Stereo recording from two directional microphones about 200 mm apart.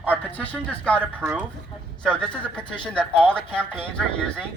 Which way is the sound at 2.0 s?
5° left (ahead or behind).